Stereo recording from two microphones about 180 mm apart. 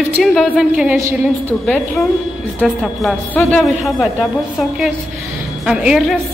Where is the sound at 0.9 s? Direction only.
15° right (ahead or behind).